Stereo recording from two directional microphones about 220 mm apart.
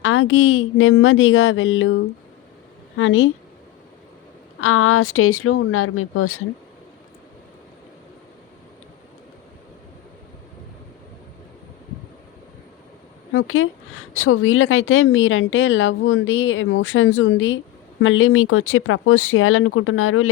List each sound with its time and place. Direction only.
0.0 s a woman's voice: 65° left (ahead or behind)
3.0 s a woman's voice: 60° left (ahead or behind)
4.6 s speech: 75° left (ahead or behind)
13.3 s a woman's voice: 65° left (ahead or behind)